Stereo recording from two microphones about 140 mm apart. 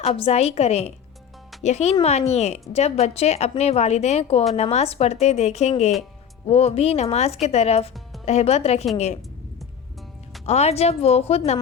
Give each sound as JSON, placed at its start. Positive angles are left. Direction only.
{"t": 0.0, "sound": "a woman's voice", "side_deg": 45}
{"t": 10.4, "sound": "a woman's voice", "side_deg": 50}